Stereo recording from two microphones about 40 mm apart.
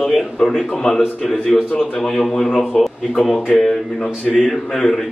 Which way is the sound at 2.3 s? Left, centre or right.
Centre.